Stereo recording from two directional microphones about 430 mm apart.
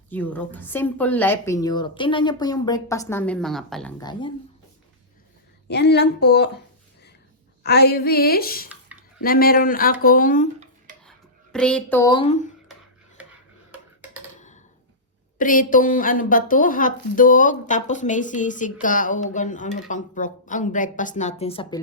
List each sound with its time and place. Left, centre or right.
0.1 s a woman's voice: centre
5.6 s speech: left
7.6 s speech: left
11.5 s a woman's voice: centre
14.3 s a sound: centre
15.4 s a woman's voice: centre